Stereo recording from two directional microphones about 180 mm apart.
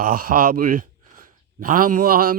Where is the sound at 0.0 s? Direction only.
50° right (ahead or behind).